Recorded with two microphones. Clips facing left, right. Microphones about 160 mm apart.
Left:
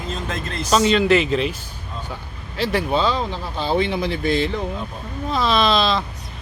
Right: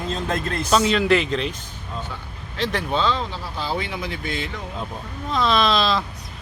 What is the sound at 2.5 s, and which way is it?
Speech, 5° left (ahead or behind).